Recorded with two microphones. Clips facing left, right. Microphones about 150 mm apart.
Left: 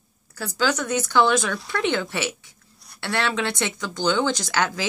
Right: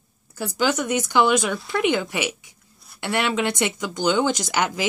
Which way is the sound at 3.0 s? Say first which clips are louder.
Right 2 dB; 15° right (ahead or behind).